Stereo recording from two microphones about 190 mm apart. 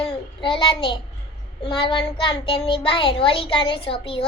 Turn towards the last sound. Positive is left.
turn(degrees=25)  # may be behind; listen again after turning